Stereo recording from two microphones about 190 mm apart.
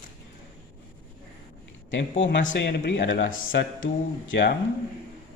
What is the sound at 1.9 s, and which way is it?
A man's voice, 75° left (ahead or behind).